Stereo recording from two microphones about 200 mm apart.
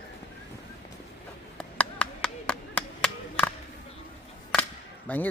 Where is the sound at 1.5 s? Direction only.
5° left (ahead or behind).